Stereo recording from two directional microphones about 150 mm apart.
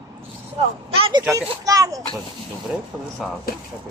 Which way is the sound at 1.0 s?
35° right (ahead or behind).